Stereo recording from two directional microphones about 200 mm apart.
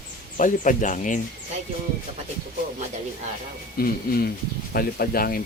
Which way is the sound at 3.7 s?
50° left (ahead or behind).